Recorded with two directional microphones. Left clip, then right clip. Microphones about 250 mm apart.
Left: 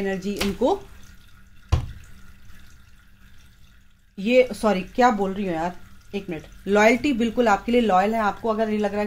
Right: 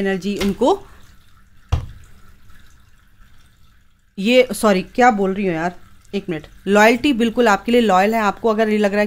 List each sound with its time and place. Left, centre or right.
0.0 s speech: right
4.1 s speech: right